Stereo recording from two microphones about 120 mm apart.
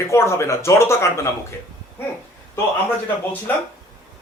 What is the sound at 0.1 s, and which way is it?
Speech, 20° left (ahead or behind).